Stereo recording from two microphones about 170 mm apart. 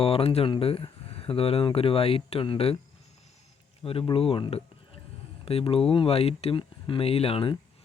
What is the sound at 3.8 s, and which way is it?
Speech, 35° left (ahead or behind).